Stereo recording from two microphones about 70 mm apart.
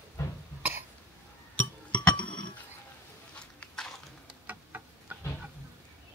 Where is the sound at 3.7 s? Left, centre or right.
Centre.